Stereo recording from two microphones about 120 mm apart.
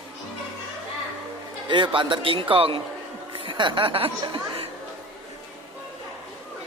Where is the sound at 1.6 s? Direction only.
40° right (ahead or behind).